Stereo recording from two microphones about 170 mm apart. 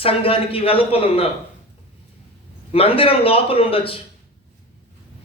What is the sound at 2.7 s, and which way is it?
A man's voice, 35° left (ahead or behind).